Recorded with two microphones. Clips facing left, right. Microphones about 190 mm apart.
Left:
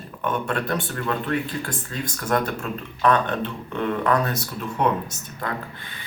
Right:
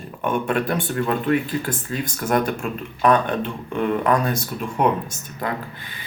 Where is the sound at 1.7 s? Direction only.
25° right (ahead or behind).